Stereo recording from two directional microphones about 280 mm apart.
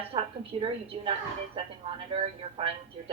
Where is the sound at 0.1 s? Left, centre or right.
Centre.